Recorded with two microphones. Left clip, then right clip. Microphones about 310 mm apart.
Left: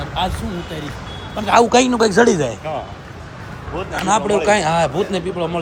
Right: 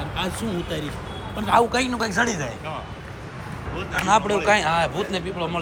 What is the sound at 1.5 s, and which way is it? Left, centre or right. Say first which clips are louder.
A man's voice: left 7 dB; left.